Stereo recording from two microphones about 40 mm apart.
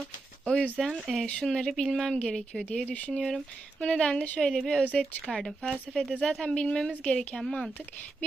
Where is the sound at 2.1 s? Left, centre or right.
Left.